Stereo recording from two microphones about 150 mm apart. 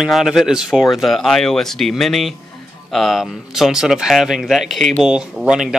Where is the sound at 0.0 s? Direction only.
Centre (ahead or behind).